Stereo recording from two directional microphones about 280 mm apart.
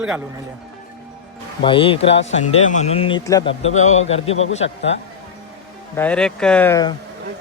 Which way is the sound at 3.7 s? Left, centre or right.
Left.